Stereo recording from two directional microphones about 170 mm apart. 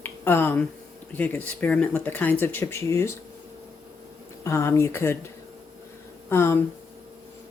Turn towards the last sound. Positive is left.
turn(degrees=15)  # may be behind; listen again after turning